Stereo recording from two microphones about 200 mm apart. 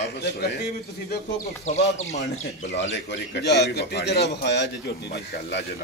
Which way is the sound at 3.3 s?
55° left (ahead or behind).